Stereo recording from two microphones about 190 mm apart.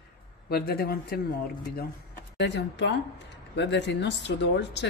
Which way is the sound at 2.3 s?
65° left (ahead or behind).